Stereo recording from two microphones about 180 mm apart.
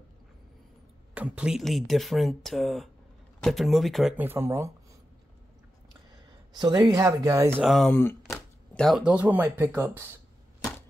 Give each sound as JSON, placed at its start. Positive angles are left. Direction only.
{"t": 1.1, "sound": "speech", "side_deg": -5}
{"t": 4.2, "sound": "speech", "side_deg": -15}
{"t": 6.5, "sound": "speech", "side_deg": -20}
{"t": 7.6, "sound": "speech", "side_deg": 0}
{"t": 8.3, "sound": "speech", "side_deg": 0}